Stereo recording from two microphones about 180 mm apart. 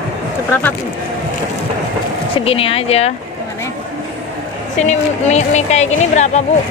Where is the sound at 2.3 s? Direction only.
30° left (ahead or behind).